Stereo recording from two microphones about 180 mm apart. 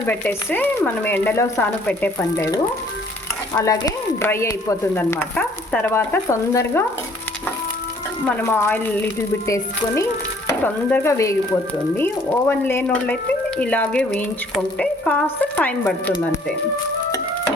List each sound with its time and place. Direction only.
0.1 s speech: 10° left (ahead or behind)
8.4 s speech: 10° left (ahead or behind)